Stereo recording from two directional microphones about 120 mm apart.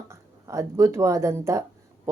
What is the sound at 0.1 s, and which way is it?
Speech, 25° right (ahead or behind).